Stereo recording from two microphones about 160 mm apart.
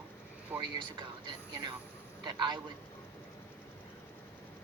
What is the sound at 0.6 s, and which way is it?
Speech, 30° right (ahead or behind).